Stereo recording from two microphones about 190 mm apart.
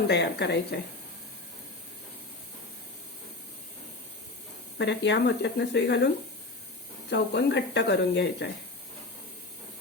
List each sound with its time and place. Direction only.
0.1 s speech: 65° left (ahead or behind)
4.8 s speech: 65° left (ahead or behind)
7.1 s speech: 60° left (ahead or behind)